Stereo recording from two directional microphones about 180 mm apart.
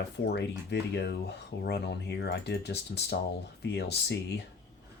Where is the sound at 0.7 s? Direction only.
70° left (ahead or behind).